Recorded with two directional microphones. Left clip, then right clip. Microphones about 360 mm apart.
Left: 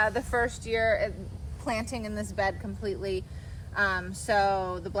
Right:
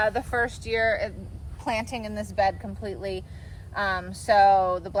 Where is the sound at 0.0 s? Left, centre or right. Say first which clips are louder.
Right 2 dB; centre.